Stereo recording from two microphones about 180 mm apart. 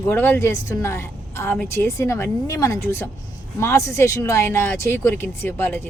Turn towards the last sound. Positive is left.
turn(degrees=10)  # may be behind; listen again after turning